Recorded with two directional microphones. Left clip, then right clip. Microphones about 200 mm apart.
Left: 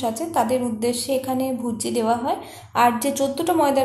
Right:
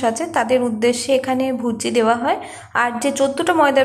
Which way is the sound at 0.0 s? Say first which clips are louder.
Right 3 dB; 10° right (ahead or behind).